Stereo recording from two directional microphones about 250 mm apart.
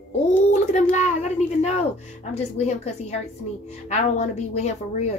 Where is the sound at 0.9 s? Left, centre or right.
Left.